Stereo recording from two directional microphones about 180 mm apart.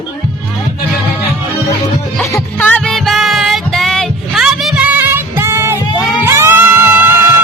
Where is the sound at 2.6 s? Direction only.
5° left (ahead or behind).